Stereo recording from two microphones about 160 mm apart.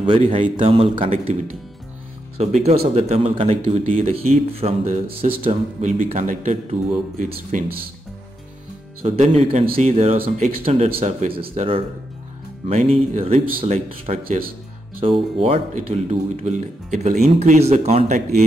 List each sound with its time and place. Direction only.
0.0 s speech: 35° right (ahead or behind); by 7.8 s 60° right (ahead or behind)
9.0 s speech: 40° right (ahead or behind)